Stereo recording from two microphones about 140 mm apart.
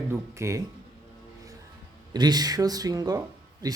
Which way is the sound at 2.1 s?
30° right (ahead or behind).